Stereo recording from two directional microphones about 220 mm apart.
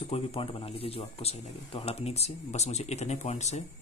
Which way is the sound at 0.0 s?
25° left (ahead or behind).